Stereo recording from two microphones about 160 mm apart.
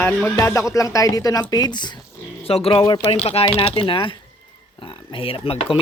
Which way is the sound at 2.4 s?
35° left (ahead or behind).